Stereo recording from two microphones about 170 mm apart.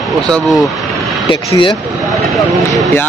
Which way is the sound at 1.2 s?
30° left (ahead or behind).